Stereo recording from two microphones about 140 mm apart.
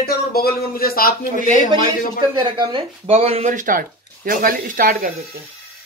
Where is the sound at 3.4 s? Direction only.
70° right (ahead or behind); by 5.1 s 85° right.